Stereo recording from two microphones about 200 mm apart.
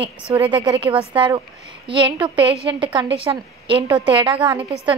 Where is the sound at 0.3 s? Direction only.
20° right (ahead or behind).